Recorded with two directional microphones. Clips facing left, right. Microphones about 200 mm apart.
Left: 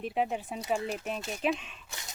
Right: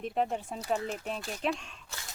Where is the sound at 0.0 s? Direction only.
5° left (ahead or behind).